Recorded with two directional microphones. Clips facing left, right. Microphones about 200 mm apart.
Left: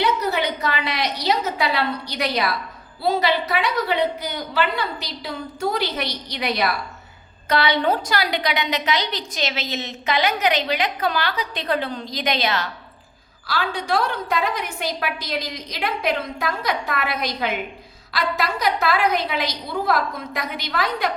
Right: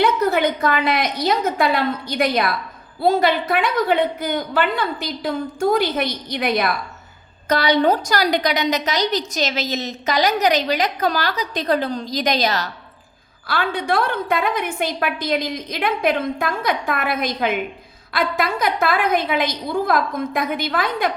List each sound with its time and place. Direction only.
0.0 s a woman's voice: 50° right (ahead or behind)
13.5 s a woman's voice: 55° right (ahead or behind)